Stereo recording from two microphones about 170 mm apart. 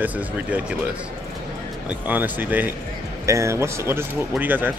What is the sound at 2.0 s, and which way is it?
Speech, 10° right (ahead or behind).